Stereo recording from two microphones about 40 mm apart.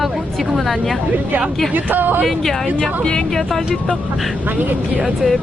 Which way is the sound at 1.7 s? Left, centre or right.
Right.